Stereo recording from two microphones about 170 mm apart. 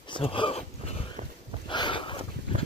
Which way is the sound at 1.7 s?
30° left (ahead or behind).